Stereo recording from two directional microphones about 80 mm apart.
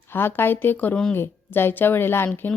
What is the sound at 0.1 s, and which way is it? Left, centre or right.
A woman's voice, left.